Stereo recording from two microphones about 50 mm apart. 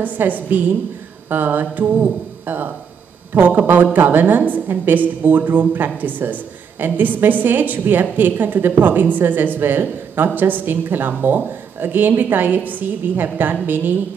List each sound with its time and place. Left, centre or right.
0.0 s a woman's voice: right